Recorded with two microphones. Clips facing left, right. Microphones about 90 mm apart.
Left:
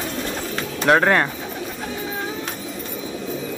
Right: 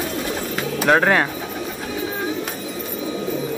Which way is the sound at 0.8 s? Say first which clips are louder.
Even; centre (ahead or behind).